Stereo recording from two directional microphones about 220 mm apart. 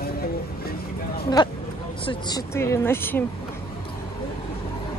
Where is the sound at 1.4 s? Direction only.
20° left (ahead or behind).